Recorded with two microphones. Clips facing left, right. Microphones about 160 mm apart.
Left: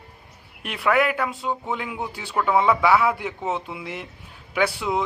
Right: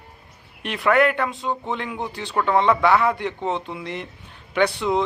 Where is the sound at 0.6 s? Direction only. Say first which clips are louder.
Right 3 dB; centre (ahead or behind).